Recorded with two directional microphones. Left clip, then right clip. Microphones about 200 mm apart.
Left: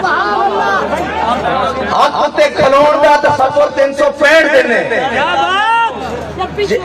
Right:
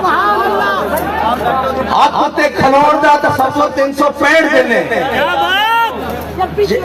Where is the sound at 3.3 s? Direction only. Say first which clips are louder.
Left 2 dB; 40° right (ahead or behind).